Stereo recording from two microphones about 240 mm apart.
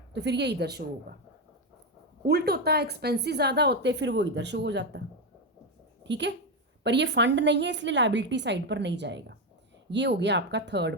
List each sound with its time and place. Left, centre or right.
0.1 s a woman's voice: right
2.2 s a woman's voice: right